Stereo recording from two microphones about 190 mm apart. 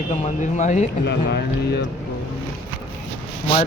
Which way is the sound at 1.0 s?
60° left (ahead or behind).